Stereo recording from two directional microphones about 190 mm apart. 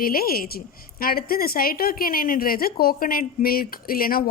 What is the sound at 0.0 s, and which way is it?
A woman's voice, 50° left (ahead or behind).